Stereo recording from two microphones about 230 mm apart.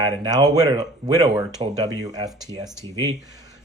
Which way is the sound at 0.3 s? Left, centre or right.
Centre.